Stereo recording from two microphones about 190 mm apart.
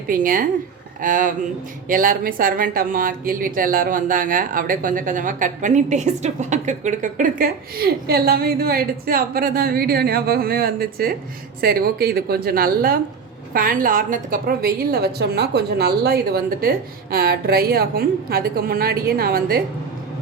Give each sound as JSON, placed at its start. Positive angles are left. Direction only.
{"t": 0.1, "sound": "speech", "side_deg": -45}